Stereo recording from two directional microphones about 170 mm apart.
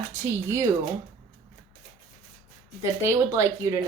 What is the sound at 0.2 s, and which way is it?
Speech, 15° right (ahead or behind).